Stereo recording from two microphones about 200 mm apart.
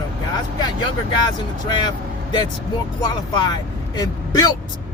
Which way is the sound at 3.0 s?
20° left (ahead or behind).